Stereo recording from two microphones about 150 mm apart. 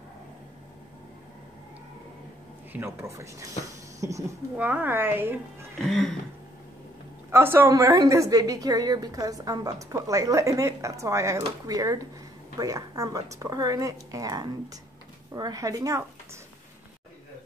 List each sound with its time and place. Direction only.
2.7 s a woman's voice: 15° right (ahead or behind)
5.9 s a sound: centre (ahead or behind)
7.2 s a woman's voice: 15° right (ahead or behind)